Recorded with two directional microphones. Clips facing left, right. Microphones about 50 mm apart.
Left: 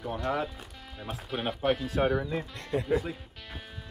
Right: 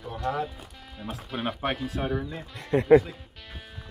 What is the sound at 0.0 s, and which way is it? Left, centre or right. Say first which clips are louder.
Speech: right 1 dB; centre.